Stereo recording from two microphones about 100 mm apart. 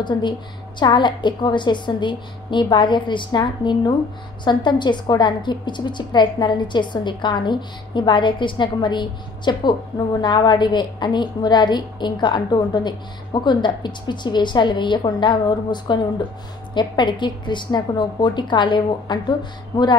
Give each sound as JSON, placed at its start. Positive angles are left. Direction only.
{"t": 0.0, "sound": "a woman's voice", "side_deg": 50}